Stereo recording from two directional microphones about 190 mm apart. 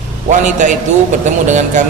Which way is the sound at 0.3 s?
40° right (ahead or behind).